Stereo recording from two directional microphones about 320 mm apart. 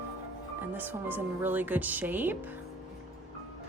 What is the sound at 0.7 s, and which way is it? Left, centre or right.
A woman's voice, centre.